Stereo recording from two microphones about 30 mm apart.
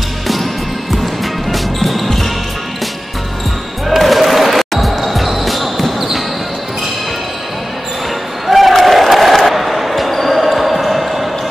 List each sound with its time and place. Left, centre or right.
1.5 s music: centre
4.0 s basketball bounce: centre
8.5 s a sound: centre
8.8 s crowd: centre
9.5 s basketball bounce: centre